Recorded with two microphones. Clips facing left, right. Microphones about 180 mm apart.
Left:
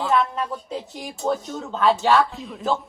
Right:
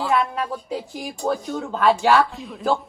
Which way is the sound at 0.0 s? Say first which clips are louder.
Even; 5° right (ahead or behind).